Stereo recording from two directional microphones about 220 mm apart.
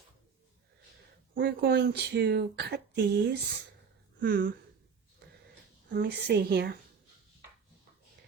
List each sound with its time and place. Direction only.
1.3 s speech: 45° right (ahead or behind)
5.9 s speech: 45° right (ahead or behind)